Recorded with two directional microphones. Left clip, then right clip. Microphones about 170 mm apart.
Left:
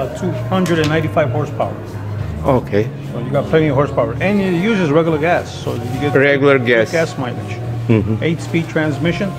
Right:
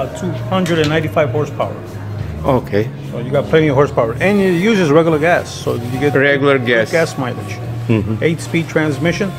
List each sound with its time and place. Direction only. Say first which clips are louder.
0.2 s speech: even; 25° right (ahead or behind)
2.4 s speech: even; 10° right (ahead or behind)
3.3 s speech: right 2 dB; 45° right (ahead or behind)
6.1 s speech: left 1 dB; centre (ahead or behind)
7.0 s speech: right 2 dB; 55° right (ahead or behind)